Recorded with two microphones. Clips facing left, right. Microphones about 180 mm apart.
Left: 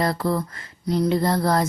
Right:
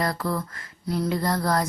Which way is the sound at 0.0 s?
25° left (ahead or behind).